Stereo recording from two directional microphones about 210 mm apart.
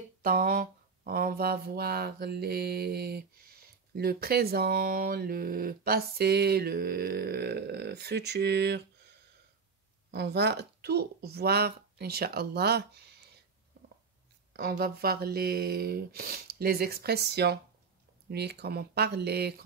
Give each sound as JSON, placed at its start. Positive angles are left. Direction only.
{"t": 0.2, "sound": "speech", "side_deg": -45}
{"t": 10.1, "sound": "speech", "side_deg": -50}
{"t": 14.5, "sound": "speech", "side_deg": -45}